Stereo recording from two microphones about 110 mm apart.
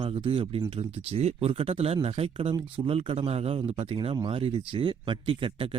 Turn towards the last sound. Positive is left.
turn(degrees=-55)  # may be behind; listen again after turning